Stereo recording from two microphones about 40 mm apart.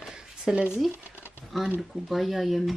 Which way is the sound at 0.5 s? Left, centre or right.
Right.